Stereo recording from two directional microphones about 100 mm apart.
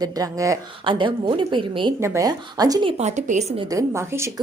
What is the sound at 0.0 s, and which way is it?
Speech, 35° right (ahead or behind).